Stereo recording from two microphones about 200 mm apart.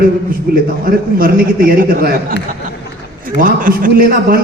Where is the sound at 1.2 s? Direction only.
45° right (ahead or behind).